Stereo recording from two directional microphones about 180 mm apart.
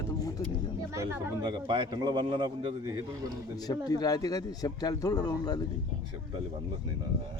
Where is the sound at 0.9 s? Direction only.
15° right (ahead or behind).